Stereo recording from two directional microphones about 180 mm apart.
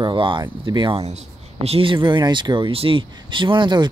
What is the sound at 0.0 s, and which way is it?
Speech, 25° right (ahead or behind).